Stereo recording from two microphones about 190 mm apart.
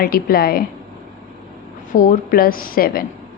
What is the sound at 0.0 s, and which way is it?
Speech, 50° left (ahead or behind).